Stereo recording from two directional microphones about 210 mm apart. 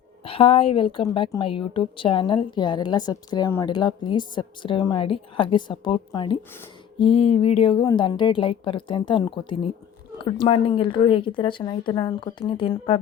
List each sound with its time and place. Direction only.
0.3 s a woman's voice: 25° left (ahead or behind)